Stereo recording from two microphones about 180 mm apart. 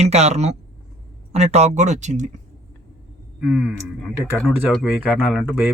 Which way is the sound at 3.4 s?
5° right (ahead or behind).